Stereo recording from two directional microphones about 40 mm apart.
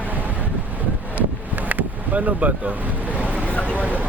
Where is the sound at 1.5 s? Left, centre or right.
Right.